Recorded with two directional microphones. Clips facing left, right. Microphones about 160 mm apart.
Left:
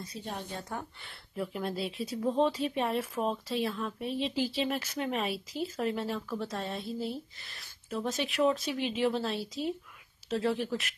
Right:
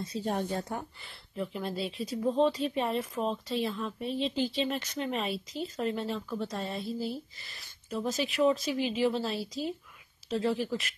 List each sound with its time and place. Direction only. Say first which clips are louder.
0.2 s speech: right 8 dB; 45° right (ahead or behind)
1.0 s a woman's voice: even; 5° left (ahead or behind)